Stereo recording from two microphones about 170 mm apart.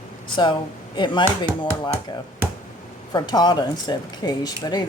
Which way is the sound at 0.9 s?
25° left (ahead or behind).